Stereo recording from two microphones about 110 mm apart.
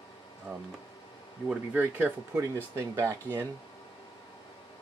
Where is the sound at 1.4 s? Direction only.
15° right (ahead or behind).